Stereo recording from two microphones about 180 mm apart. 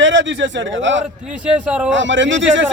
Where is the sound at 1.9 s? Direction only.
90° right.